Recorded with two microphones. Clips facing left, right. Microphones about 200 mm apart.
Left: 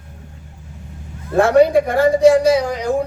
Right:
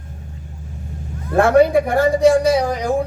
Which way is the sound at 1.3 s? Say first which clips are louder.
Left 1 dB; 55° right (ahead or behind).